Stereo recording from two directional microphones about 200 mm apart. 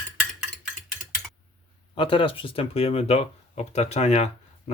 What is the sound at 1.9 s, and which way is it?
Speech, 25° left (ahead or behind).